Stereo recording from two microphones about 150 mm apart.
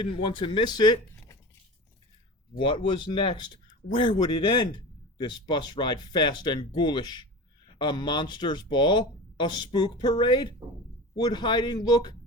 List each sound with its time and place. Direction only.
0.0 s speech: 35° left (ahead or behind)
2.6 s speech: 35° left (ahead or behind)